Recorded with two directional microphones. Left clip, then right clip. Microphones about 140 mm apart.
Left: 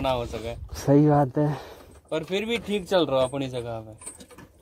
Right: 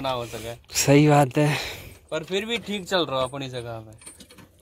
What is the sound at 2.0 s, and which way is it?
A man's voice, 50° left (ahead or behind).